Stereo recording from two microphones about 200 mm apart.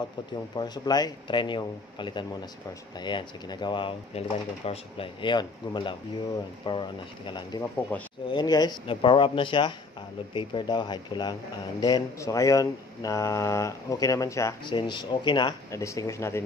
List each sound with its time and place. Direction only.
0.6 s speech: 20° left (ahead or behind)
7.9 s speech: 10° left (ahead or behind)
8.3 s speech: 20° left (ahead or behind)